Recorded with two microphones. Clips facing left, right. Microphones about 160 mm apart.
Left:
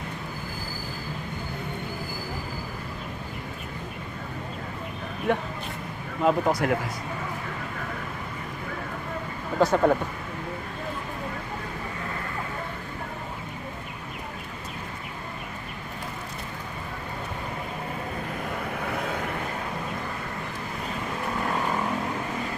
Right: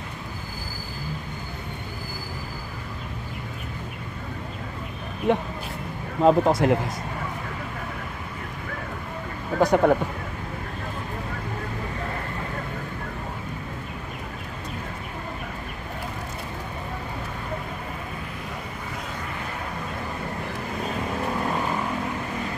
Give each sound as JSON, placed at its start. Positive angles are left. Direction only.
{"t": 5.3, "sound": "speech", "side_deg": -20}
{"t": 9.6, "sound": "speech", "side_deg": -15}